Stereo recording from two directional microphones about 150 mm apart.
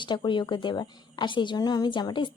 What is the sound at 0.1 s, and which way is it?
A woman's voice, 30° left (ahead or behind).